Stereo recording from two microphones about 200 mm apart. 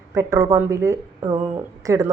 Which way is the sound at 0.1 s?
15° right (ahead or behind).